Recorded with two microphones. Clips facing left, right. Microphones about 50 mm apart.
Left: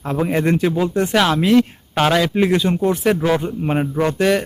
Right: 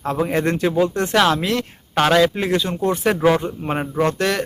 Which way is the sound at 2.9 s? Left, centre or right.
Centre.